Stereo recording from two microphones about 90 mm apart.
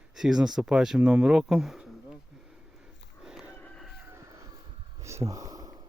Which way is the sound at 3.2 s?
5° right (ahead or behind).